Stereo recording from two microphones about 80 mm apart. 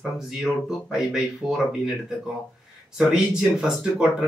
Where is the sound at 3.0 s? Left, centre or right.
Centre.